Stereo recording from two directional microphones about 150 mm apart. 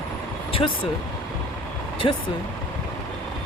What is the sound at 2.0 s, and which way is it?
Speech, 30° left (ahead or behind).